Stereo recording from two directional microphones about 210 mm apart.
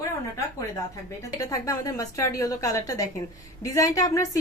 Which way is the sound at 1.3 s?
15° left (ahead or behind).